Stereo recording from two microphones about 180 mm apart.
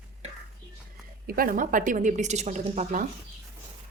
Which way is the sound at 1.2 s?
50° right (ahead or behind).